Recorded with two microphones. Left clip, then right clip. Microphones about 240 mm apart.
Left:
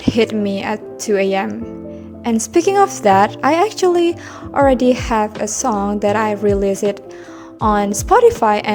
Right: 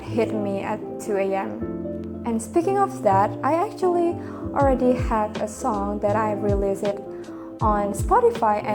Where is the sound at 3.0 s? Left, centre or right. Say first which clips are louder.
Left 7 dB; left.